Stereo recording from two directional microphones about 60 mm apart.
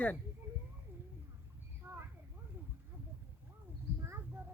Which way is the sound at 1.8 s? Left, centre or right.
Right.